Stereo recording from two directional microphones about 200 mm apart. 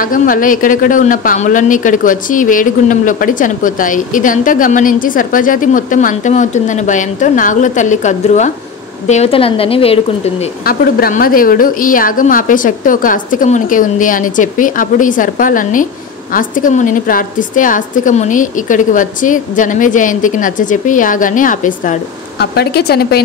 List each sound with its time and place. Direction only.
0.0 s a woman's voice: 45° left (ahead or behind)
10.6 s a woman's voice: 45° left (ahead or behind)
22.4 s a woman's voice: 55° left (ahead or behind)